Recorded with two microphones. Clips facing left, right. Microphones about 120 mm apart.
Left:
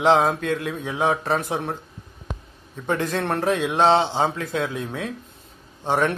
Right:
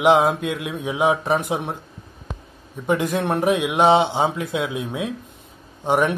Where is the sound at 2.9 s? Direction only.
15° right (ahead or behind).